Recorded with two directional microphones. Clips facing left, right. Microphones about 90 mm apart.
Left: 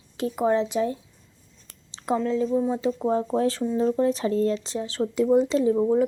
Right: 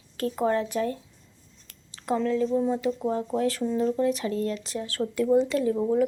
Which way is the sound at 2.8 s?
25° left (ahead or behind).